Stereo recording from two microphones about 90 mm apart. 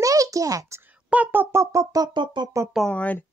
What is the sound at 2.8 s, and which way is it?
Speech, 15° left (ahead or behind).